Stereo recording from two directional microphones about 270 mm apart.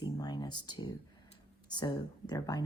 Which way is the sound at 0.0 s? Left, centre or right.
Centre.